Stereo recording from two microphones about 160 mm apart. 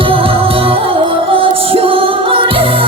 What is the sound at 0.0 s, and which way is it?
Music, 35° right (ahead or behind).